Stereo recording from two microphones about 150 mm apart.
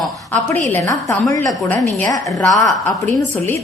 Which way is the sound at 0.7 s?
20° left (ahead or behind).